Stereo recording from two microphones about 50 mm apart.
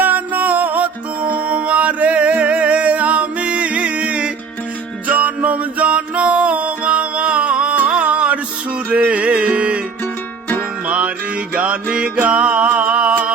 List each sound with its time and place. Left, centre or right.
0.0 s music: right
10.8 s music: right